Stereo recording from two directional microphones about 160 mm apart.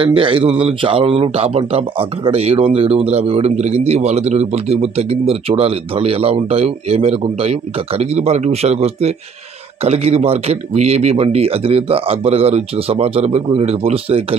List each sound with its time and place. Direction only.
0.0 s speech: 30° right (ahead or behind)